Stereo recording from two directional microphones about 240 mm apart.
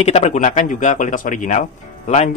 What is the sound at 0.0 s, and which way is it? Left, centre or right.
Speech, left.